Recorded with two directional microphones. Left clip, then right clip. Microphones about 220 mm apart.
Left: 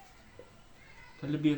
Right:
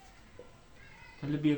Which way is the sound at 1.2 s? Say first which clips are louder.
Left 1 dB; 15° right (ahead or behind).